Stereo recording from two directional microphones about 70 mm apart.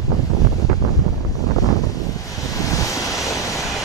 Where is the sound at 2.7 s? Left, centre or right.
Left.